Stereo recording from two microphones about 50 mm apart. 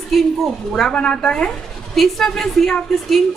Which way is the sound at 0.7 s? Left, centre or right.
Centre.